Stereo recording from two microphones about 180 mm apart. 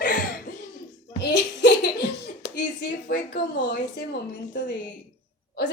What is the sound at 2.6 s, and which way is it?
Speech, 70° left (ahead or behind).